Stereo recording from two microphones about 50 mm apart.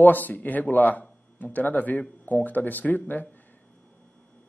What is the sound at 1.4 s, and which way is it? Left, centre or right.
A man's voice, left.